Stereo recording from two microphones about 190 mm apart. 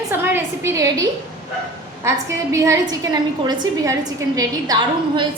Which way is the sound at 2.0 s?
15° right (ahead or behind).